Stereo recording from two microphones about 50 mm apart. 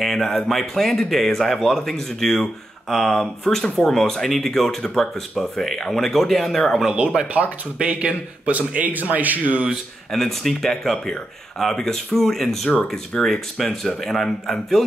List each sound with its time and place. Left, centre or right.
0.0 s speech: centre
7.0 s speech: centre
7.3 s a man's voice: right
10.1 s speech: centre